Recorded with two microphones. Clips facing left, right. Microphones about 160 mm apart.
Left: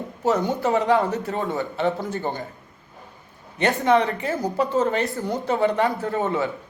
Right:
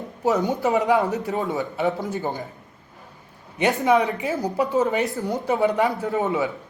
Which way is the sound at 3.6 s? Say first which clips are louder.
Even; 10° right (ahead or behind).